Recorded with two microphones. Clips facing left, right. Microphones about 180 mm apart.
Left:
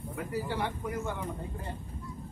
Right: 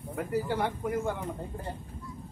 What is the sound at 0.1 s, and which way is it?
Speech, 50° right (ahead or behind).